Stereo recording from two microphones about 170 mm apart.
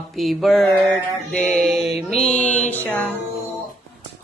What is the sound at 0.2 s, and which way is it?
Mantra, centre (ahead or behind).